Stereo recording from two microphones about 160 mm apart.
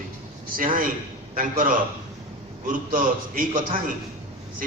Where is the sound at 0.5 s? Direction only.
60° right (ahead or behind).